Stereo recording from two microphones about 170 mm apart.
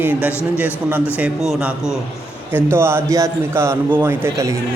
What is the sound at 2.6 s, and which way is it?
Music, 15° right (ahead or behind).